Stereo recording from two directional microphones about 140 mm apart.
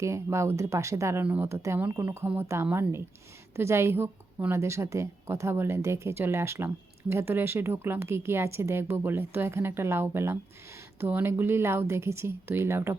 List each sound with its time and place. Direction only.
0.0 s a woman's voice: 20° right (ahead or behind)